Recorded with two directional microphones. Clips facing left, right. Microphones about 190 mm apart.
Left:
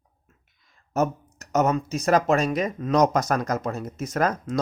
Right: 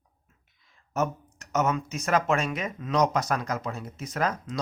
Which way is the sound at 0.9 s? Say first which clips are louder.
Left 4 dB; 40° left (ahead or behind).